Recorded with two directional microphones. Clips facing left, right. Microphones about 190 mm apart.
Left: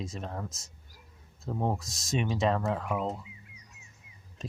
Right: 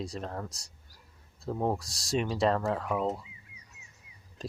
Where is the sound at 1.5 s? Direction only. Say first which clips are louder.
Right 1 dB; centre (ahead or behind).